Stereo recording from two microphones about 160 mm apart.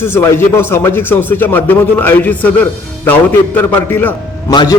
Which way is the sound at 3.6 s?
10° left (ahead or behind).